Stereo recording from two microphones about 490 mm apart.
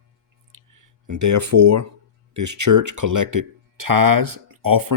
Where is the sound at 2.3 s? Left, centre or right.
Right.